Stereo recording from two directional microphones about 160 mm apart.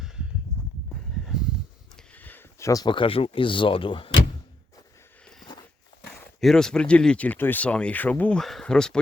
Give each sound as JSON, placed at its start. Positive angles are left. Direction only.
{"t": 2.1, "sound": "speech", "side_deg": 10}
{"t": 6.4, "sound": "speech", "side_deg": 5}